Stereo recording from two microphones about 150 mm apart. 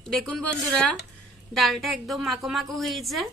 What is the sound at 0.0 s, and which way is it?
A woman's voice, 5° left (ahead or behind).